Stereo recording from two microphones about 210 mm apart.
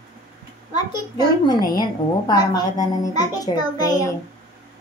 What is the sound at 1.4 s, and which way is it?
A woman's voice, 20° left (ahead or behind).